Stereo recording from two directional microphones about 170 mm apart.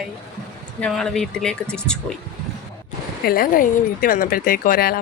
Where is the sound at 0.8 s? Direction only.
5° left (ahead or behind).